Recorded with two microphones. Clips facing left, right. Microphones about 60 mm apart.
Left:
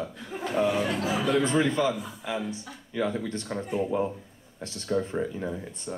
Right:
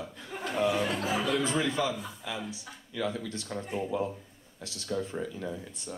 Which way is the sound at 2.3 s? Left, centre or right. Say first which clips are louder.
Left 7 dB; left.